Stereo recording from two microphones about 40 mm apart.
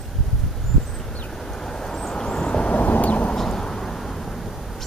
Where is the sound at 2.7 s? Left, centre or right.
Left.